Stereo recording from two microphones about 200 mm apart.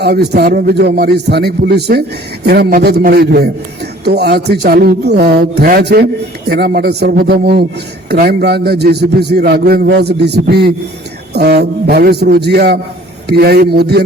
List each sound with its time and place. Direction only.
0.0 s a man's voice: 55° right (ahead or behind)